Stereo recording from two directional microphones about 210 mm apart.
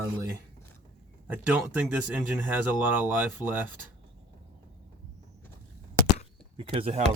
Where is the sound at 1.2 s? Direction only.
5° right (ahead or behind).